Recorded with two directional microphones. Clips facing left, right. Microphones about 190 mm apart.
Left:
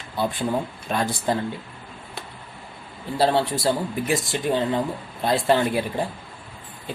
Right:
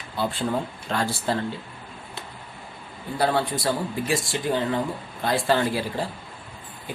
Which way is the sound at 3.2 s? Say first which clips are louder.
Left 3 dB; 25° left (ahead or behind).